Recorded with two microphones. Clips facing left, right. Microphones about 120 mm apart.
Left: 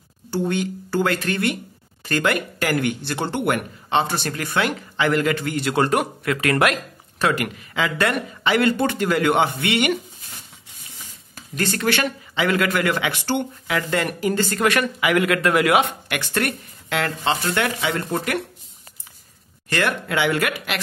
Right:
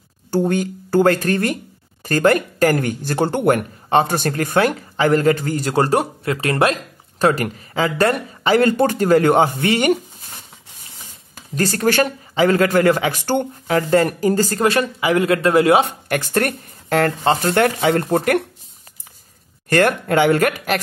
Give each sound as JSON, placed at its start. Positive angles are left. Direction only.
{"t": 0.3, "sound": "speech", "side_deg": -45}
{"t": 11.5, "sound": "speech", "side_deg": -40}
{"t": 19.7, "sound": "speech", "side_deg": -45}